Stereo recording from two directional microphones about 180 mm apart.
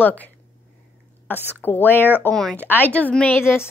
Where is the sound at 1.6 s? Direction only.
10° left (ahead or behind).